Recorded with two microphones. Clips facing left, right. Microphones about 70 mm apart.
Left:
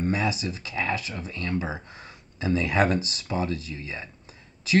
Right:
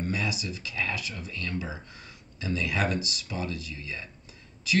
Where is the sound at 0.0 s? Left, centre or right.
Left.